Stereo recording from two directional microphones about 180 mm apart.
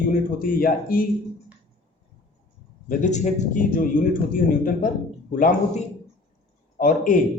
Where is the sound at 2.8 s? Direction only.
40° left (ahead or behind).